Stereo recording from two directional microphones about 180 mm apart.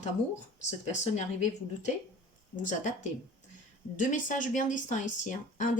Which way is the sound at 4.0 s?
45° left (ahead or behind).